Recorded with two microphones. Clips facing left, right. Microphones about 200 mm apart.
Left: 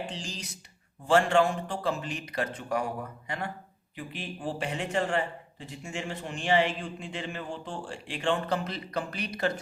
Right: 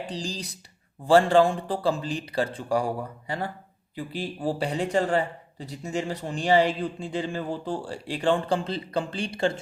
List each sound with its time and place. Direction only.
0.0 s a man's voice: 35° right (ahead or behind)